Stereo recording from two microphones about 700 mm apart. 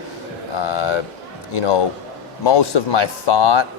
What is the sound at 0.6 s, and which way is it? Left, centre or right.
A man's voice, left.